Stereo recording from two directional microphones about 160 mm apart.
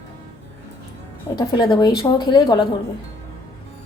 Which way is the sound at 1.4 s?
30° left (ahead or behind).